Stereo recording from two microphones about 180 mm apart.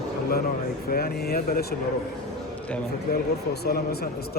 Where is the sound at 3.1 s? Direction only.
60° left (ahead or behind).